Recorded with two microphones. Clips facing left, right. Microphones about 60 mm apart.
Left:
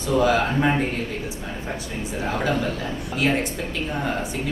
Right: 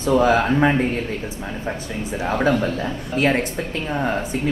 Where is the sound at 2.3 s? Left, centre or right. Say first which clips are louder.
Right 6 dB; right.